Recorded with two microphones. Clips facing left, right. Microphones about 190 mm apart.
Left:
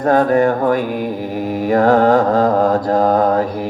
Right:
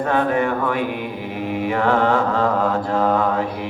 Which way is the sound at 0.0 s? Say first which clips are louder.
Left 6 dB; 40° left (ahead or behind).